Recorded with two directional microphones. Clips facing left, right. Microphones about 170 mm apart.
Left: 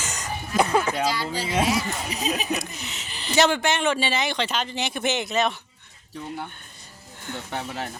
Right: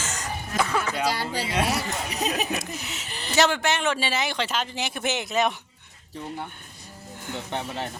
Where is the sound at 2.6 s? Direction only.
5° right (ahead or behind).